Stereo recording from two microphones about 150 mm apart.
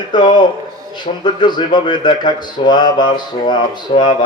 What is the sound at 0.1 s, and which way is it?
A man's voice, 30° left (ahead or behind).